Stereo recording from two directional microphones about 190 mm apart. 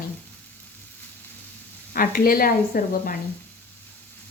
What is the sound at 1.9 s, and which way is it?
A woman's voice, 50° left (ahead or behind).